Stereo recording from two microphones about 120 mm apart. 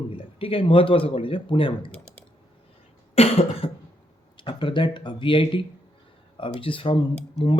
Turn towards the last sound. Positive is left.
turn(degrees=45)  # may be behind; listen again after turning